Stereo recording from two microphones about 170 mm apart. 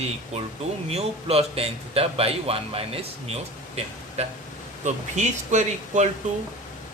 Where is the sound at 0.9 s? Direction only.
35° right (ahead or behind).